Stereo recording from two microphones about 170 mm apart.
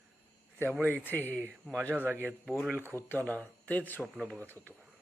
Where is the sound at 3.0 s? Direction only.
10° left (ahead or behind).